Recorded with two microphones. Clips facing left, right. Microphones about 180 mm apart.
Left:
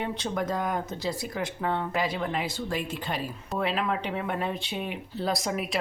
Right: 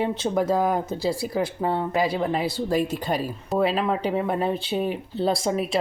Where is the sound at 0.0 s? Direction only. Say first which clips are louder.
Right 7 dB; 30° right (ahead or behind).